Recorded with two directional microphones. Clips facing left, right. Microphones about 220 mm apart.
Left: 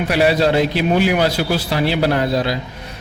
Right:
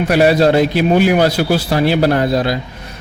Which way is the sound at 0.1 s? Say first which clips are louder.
Right 4 dB; 45° right (ahead or behind).